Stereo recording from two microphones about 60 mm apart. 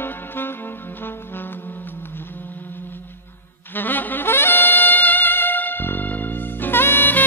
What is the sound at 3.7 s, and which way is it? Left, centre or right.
Saxophone, left.